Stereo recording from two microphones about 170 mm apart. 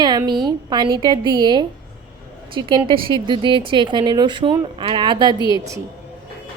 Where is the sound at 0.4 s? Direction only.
25° right (ahead or behind).